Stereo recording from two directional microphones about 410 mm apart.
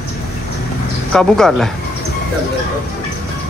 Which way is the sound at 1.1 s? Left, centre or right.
Centre.